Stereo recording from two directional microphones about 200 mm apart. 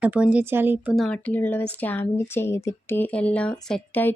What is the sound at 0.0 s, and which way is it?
Speech, 5° right (ahead or behind).